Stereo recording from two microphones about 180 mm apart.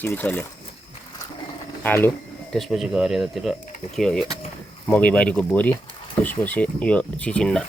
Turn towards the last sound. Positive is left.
turn(degrees=5)  # may be behind; listen again after turning